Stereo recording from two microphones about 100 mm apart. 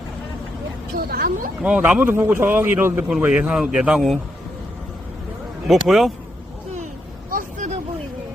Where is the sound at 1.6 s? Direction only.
15° right (ahead or behind).